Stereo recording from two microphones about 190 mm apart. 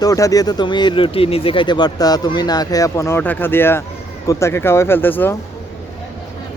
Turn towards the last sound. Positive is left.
turn(degrees=10)  # may be behind; listen again after turning